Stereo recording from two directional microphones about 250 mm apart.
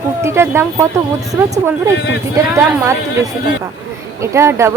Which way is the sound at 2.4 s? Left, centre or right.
Centre.